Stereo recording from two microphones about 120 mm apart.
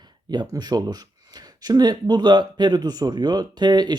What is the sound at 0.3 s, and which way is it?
Speech, 35° right (ahead or behind).